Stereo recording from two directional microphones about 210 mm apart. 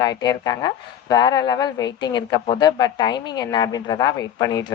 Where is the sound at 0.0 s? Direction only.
20° left (ahead or behind).